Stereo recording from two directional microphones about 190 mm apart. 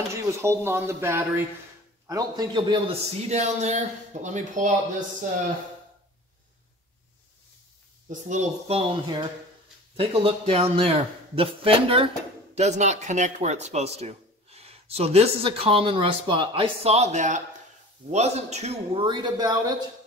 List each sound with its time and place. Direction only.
0.1 s speech: 15° right (ahead or behind); by 4.6 s 40° right (ahead or behind)
8.1 s a man's voice: 40° right (ahead or behind)
19.0 s a man's voice: 25° right (ahead or behind)